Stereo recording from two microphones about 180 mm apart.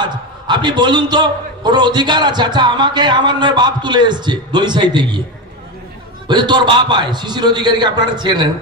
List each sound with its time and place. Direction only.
0.0 s a man's voice: 25° right (ahead or behind)
6.2 s a man's voice: 25° right (ahead or behind)